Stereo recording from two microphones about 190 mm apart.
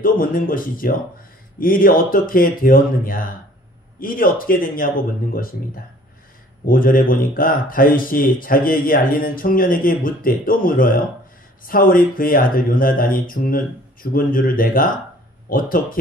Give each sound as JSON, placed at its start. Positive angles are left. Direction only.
{"t": 0.0, "sound": "speech", "side_deg": 50}
{"t": 6.6, "sound": "speech", "side_deg": 50}